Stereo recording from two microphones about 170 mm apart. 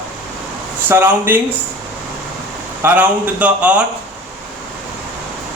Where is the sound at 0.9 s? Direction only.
10° right (ahead or behind).